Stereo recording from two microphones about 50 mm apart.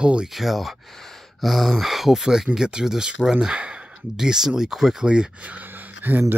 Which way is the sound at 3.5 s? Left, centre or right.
Right.